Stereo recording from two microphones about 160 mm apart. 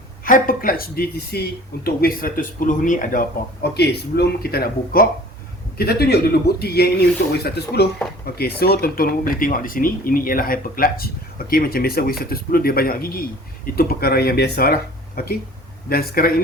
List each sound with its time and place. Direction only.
0.3 s a man's voice: 60° left (ahead or behind)